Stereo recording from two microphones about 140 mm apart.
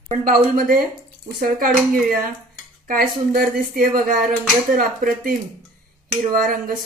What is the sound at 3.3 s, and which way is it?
Speech, 90° right.